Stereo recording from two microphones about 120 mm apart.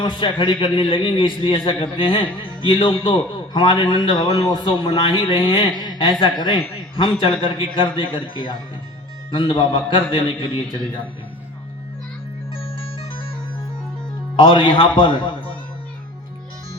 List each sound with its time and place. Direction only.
0.0 s a man's voice: 45° left (ahead or behind)
14.3 s a man's voice: 45° left (ahead or behind)